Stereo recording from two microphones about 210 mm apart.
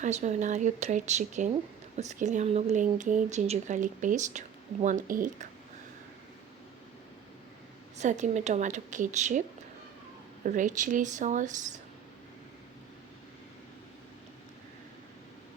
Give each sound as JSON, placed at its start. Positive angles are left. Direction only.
{"t": 0.0, "sound": "speech", "side_deg": -35}
{"t": 7.9, "sound": "speech", "side_deg": -35}
{"t": 10.4, "sound": "speech", "side_deg": -40}